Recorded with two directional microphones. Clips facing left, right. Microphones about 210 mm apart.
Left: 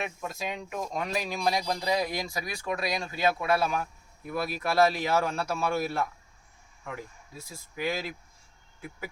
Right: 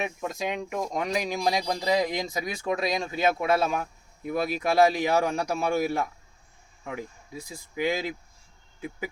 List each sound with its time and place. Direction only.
0.0 s speech: 15° right (ahead or behind)